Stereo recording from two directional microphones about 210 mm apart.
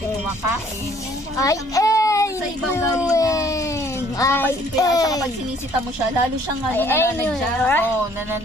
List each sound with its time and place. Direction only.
1.3 s a child's voice: 15° left (ahead or behind)
6.7 s speech: 10° left (ahead or behind)